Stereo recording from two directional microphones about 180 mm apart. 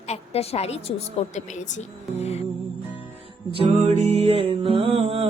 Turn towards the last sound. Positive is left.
turn(degrees=-35)  # may be behind; listen again after turning